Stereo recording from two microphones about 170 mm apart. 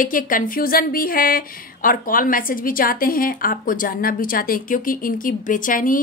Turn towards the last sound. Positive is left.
turn(degrees=55)  # may be behind; listen again after turning